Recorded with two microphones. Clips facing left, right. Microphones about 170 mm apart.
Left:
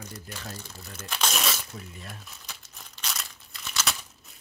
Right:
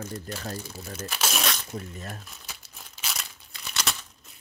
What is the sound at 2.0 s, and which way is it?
Speech, 45° right (ahead or behind).